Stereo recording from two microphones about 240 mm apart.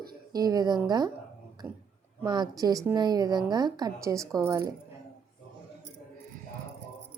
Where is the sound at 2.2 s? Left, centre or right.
Centre.